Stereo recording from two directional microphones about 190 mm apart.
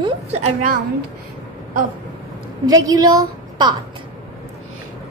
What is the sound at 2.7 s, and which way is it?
A woman's voice, 20° right (ahead or behind).